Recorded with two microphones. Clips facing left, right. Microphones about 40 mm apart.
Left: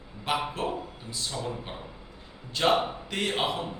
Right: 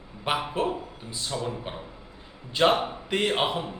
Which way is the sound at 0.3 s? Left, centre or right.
Centre.